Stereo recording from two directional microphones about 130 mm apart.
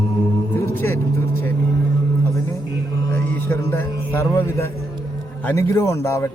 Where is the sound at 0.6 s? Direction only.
20° left (ahead or behind).